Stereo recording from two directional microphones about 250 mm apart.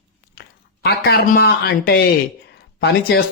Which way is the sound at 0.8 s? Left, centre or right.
Left.